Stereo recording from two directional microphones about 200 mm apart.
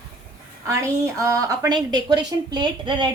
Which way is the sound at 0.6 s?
15° right (ahead or behind).